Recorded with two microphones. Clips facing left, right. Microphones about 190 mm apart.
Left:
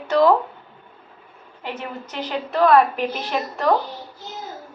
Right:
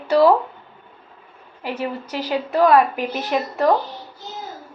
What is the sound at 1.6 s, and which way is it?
A woman's voice, 10° right (ahead or behind).